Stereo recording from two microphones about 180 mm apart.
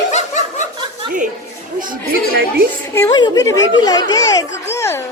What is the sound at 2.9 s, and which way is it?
A woman's voice, 20° left (ahead or behind).